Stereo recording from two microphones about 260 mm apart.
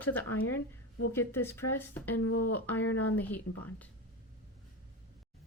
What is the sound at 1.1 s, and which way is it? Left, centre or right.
Speech, centre.